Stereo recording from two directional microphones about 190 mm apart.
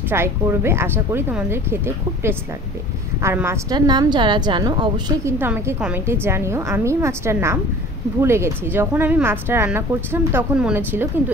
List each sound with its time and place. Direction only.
0.1 s a woman's voice: 15° right (ahead or behind)
3.2 s a woman's voice: 15° right (ahead or behind)
5.4 s a woman's voice: 10° right (ahead or behind)